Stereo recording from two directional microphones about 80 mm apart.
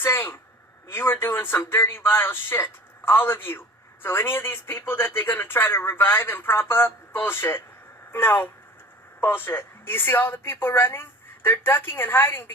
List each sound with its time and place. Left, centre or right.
0.0 s speech: left